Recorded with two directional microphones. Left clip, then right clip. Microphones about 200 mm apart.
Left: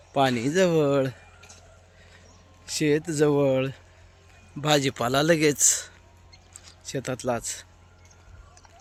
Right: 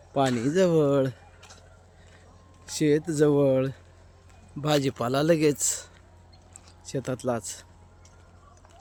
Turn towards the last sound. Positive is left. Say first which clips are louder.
# left 1 dB
turn(degrees=-10)  # may be behind; listen again after turning